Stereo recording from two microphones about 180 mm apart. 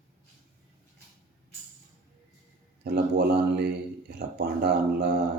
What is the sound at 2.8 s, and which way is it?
A man's voice, 65° right (ahead or behind).